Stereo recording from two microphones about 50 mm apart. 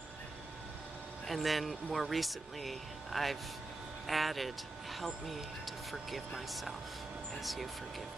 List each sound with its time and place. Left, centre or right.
1.2 s speech: centre